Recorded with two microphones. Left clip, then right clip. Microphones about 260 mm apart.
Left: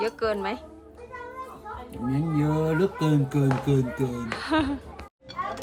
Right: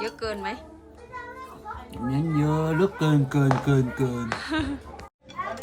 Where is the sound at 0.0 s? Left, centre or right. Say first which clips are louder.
Left 4 dB; centre.